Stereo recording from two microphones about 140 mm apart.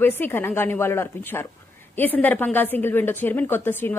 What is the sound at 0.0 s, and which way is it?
A woman's voice, 15° left (ahead or behind).